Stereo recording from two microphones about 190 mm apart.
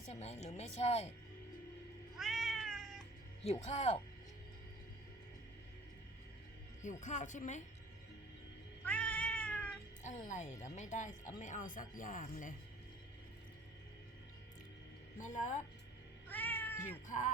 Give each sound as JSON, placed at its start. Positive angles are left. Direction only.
{"t": 0.0, "sound": "speech", "side_deg": 35}
{"t": 2.1, "sound": "cat", "side_deg": 0}
{"t": 3.4, "sound": "speech", "side_deg": 35}
{"t": 6.8, "sound": "speech", "side_deg": 40}
{"t": 8.8, "sound": "cat", "side_deg": 10}
{"t": 10.0, "sound": "speech", "side_deg": 40}
{"t": 15.2, "sound": "speech", "side_deg": 40}
{"t": 16.3, "sound": "cat", "side_deg": 10}
{"t": 17.1, "sound": "speech", "side_deg": 40}